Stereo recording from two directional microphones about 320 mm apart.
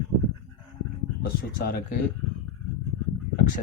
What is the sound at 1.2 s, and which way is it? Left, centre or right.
Speech, left.